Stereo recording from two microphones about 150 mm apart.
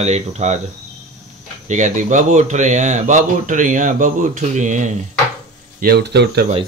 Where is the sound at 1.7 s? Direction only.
55° right (ahead or behind).